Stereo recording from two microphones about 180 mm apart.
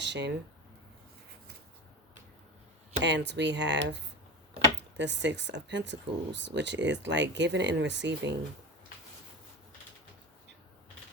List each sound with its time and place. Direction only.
0.0 s speech: 75° right (ahead or behind)
3.0 s speech: 75° right (ahead or behind)